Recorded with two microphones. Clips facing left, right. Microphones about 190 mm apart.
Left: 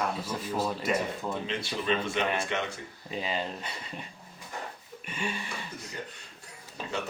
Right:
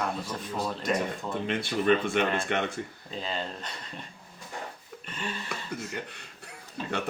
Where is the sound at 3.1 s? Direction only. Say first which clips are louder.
Left 3 dB; 10° left (ahead or behind).